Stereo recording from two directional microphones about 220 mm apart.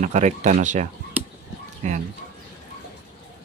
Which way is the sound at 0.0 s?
35° right (ahead or behind).